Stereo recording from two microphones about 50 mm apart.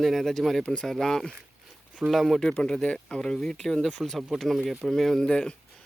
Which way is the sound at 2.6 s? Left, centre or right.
Centre.